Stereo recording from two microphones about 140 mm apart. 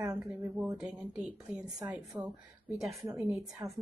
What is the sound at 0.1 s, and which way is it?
Speech, 10° right (ahead or behind).